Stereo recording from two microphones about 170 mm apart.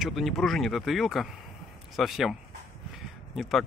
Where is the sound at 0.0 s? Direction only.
Centre (ahead or behind).